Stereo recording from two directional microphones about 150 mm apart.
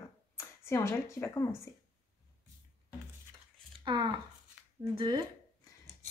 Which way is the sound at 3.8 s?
30° right (ahead or behind).